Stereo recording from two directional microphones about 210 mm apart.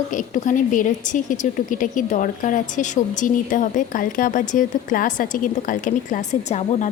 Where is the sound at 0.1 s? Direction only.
40° left (ahead or behind).